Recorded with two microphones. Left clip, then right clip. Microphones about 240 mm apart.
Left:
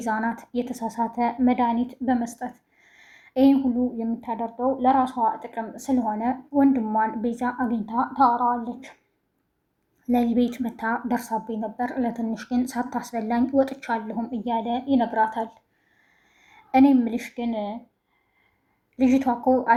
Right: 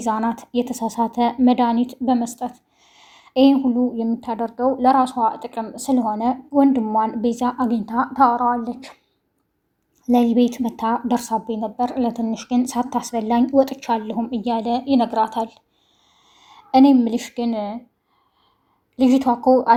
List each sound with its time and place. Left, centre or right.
0.0 s a woman's voice: right
10.1 s speech: right
16.1 s a sound: right
17.5 s speech: right
19.0 s speech: right